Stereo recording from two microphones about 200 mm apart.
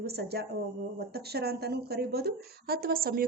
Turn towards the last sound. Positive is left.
turn(degrees=-50)  # may be behind; listen again after turning